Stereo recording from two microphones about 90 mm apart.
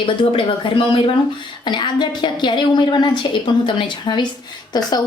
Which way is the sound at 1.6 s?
55° left (ahead or behind).